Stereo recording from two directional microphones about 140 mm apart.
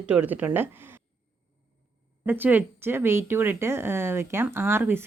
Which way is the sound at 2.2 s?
15° right (ahead or behind).